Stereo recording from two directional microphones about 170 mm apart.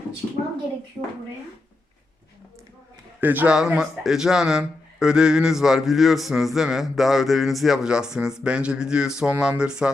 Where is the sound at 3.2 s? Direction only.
10° right (ahead or behind).